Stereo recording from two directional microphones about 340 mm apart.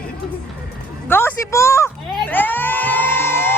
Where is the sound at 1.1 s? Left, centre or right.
Centre.